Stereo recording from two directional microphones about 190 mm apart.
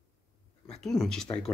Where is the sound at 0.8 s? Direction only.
Centre (ahead or behind).